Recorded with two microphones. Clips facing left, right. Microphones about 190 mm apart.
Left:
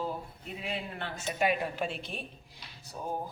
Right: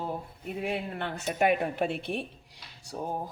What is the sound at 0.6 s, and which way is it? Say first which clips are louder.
Speech: right 5 dB; 55° right (ahead or behind).